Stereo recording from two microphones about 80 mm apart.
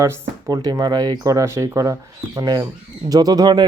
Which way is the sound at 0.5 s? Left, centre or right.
Right.